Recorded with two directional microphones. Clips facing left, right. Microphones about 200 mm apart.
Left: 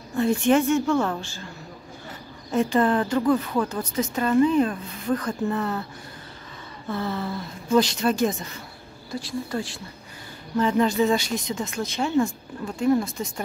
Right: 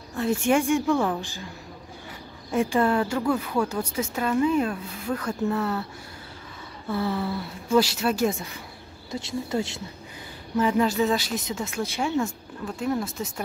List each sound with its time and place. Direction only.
0.2 s speech: 10° right (ahead or behind)
6.9 s speech: 10° right (ahead or behind)
9.1 s speech: 20° right (ahead or behind)
10.5 s speech: 5° right (ahead or behind)